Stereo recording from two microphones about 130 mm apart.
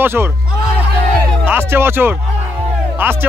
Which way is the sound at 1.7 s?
20° right (ahead or behind).